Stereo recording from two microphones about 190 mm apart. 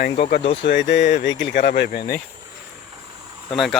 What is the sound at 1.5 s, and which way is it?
Speech, 50° left (ahead or behind).